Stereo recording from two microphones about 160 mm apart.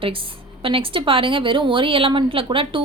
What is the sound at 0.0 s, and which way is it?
A woman's voice, 35° right (ahead or behind).